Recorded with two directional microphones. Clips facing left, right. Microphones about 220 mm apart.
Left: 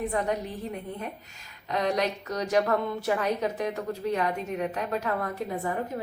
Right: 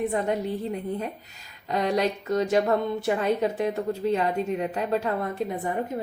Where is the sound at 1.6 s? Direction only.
30° right (ahead or behind).